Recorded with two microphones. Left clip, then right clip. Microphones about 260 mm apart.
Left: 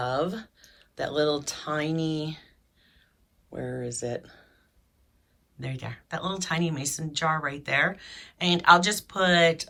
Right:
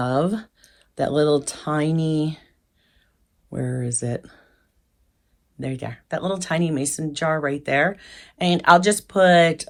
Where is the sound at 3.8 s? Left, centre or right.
Right.